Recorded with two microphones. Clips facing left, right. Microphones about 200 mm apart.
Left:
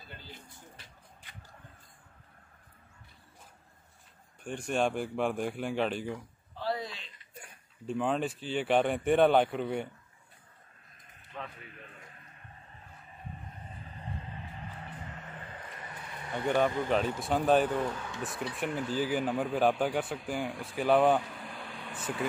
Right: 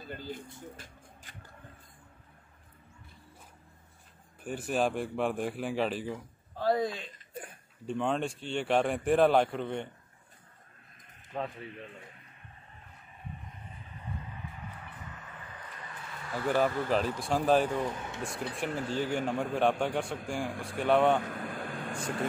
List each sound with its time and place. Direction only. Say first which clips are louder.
0.1 s speech: right 10 dB; 45° right (ahead or behind)
0.7 s music: right 4 dB; 50° right (ahead or behind)
4.4 s speech: even; 5° right (ahead or behind)
6.5 s chuckle: right 6 dB; 50° right (ahead or behind)
7.8 s speech: even; centre (ahead or behind)
11.3 s a man's voice: right 7 dB; 35° right (ahead or behind)
13.8 s music: even; 30° left (ahead or behind)
16.4 s speech: even; centre (ahead or behind)
17.9 s speech: even; 20° right (ahead or behind)
18.9 s speech: left 1 dB; 5° left (ahead or behind)
21.2 s vehicle: right 6 dB; 55° right (ahead or behind)